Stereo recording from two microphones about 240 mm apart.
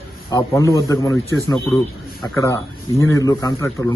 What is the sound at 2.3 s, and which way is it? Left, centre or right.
A man's voice, centre.